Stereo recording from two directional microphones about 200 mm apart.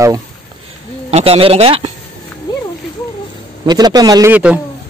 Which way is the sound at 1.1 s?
30° right (ahead or behind).